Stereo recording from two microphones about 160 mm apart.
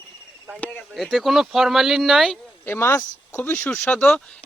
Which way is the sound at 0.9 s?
Centre (ahead or behind).